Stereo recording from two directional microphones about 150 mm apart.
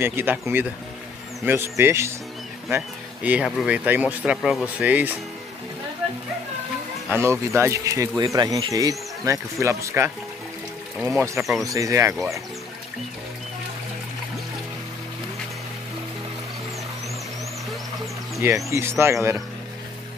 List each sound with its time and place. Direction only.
0.0 s speech: 15° right (ahead or behind)
3.3 s speech: 5° right (ahead or behind)
7.1 s speech: 15° right (ahead or behind)
18.7 s speech: 15° right (ahead or behind)